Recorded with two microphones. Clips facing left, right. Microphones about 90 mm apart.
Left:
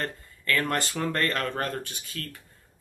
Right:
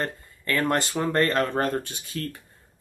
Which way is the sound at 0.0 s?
20° right (ahead or behind).